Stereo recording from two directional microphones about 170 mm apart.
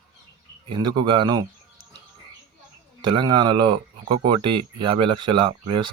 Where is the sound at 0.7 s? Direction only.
25° right (ahead or behind).